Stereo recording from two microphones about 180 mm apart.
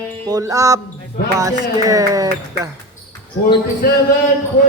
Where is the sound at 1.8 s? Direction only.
20° right (ahead or behind).